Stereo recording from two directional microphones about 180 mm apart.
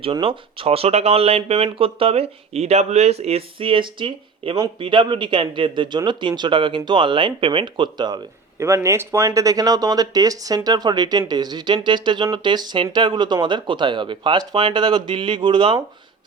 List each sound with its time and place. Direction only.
0.0 s speech: 30° right (ahead or behind)